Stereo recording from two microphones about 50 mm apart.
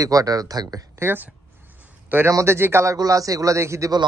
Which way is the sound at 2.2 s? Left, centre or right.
Right.